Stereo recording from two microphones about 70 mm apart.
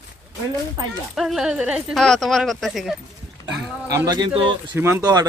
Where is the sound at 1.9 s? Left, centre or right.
Centre.